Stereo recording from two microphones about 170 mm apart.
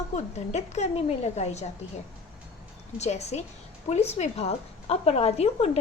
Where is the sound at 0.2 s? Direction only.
40° left (ahead or behind).